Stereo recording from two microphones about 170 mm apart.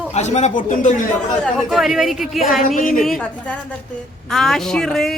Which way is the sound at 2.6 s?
55° left (ahead or behind).